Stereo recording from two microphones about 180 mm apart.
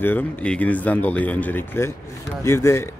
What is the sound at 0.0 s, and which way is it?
Speech, 10° left (ahead or behind).